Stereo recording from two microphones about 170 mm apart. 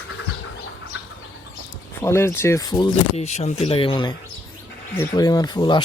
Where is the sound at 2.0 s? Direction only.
15° left (ahead or behind).